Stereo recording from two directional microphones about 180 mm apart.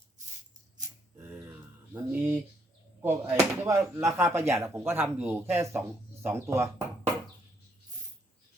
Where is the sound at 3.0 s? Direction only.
10° right (ahead or behind).